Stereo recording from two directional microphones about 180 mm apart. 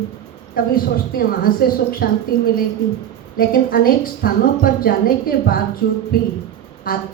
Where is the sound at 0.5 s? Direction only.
55° left (ahead or behind).